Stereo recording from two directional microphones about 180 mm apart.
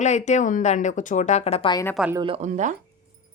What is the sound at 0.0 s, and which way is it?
A woman's voice, 40° left (ahead or behind).